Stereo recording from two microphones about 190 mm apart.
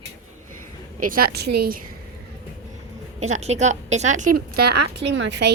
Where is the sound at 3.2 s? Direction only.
35° right (ahead or behind); by 5.5 s 65° right (ahead or behind).